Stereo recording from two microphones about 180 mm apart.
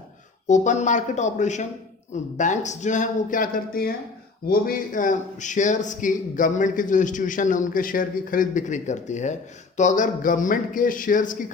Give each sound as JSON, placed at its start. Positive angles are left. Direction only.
{"t": 0.4, "sound": "a man's voice", "side_deg": 40}